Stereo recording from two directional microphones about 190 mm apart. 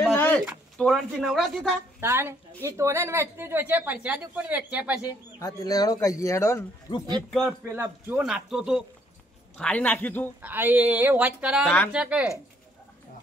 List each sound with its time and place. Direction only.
0.1 s a sound: 10° left (ahead or behind)
0.7 s speech: centre (ahead or behind)
2.0 s a woman's voice: 10° right (ahead or behind)
5.4 s speech: 20° left (ahead or behind)
7.6 s a woman's voice: 10° right (ahead or behind); by 10.3 s 10° left (ahead or behind)
10.4 s a woman's voice: 10° right (ahead or behind)